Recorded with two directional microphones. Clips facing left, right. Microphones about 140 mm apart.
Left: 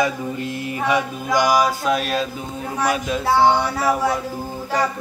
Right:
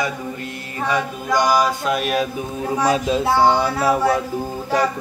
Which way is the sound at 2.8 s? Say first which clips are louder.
Right 2 dB; 30° right (ahead or behind).